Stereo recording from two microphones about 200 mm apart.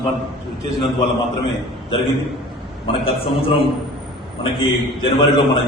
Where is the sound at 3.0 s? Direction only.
25° left (ahead or behind).